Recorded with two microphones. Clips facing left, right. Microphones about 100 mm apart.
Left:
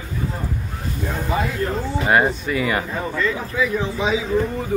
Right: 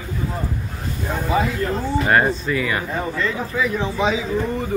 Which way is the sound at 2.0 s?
15° left (ahead or behind).